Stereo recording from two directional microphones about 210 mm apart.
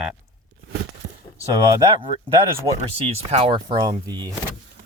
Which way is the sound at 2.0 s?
25° right (ahead or behind).